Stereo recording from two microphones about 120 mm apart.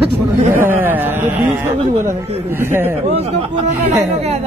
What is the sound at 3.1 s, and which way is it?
Speech, 60° right (ahead or behind).